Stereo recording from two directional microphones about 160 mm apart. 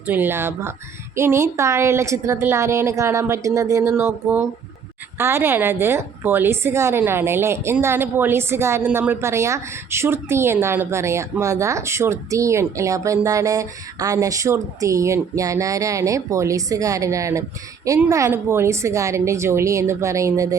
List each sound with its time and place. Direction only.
0.1 s a woman's voice: 15° right (ahead or behind)